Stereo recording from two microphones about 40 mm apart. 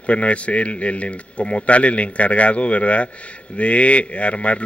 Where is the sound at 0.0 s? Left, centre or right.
Left.